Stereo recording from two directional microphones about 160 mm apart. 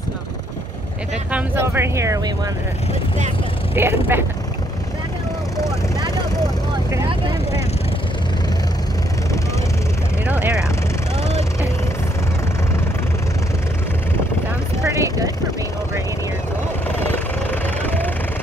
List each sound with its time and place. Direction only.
1.3 s speech: 10° right (ahead or behind)
3.7 s speech: 15° right (ahead or behind)
10.2 s speech: 10° right (ahead or behind)
14.9 s vehicle: 20° right (ahead or behind)
17.5 s vehicle: 10° left (ahead or behind)